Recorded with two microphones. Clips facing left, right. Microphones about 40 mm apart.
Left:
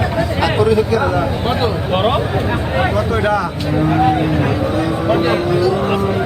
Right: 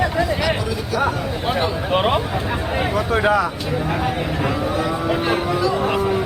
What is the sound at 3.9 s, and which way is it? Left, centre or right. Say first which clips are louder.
Speech: left 8 dB; centre.